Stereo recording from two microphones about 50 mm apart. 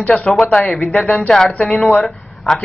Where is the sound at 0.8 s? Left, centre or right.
Left.